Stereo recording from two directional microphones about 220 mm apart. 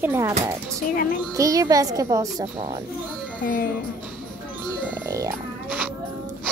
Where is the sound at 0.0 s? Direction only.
10° right (ahead or behind).